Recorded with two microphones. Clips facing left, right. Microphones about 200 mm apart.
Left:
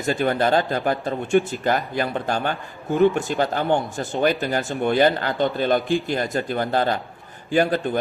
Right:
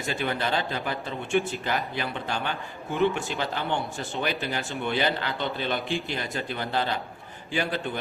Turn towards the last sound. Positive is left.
turn(degrees=45)  # may be behind; listen again after turning